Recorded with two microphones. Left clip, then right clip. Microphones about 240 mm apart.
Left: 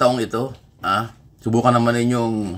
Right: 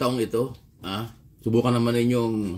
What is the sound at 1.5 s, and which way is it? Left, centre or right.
Speech, left.